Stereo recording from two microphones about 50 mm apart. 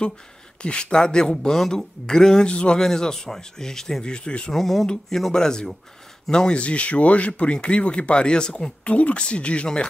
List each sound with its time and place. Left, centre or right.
0.6 s speech: left
4.0 s speech: centre
4.5 s speech: centre